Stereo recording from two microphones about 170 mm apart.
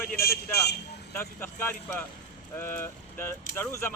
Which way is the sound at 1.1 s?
15° left (ahead or behind).